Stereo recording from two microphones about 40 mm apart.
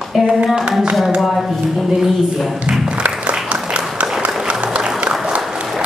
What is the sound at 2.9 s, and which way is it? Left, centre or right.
Music, right.